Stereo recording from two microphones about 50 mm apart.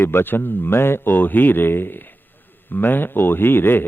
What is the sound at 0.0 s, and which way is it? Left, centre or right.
A man's voice, left.